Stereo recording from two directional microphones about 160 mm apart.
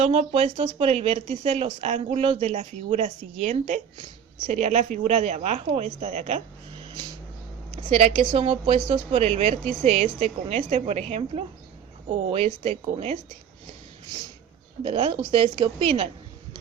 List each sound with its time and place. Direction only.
0.0 s speech: 40° right (ahead or behind)
7.9 s speech: 40° right (ahead or behind)
14.8 s speech: 35° right (ahead or behind)